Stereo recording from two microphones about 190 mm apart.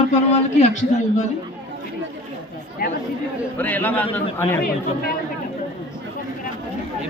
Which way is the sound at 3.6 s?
10° left (ahead or behind).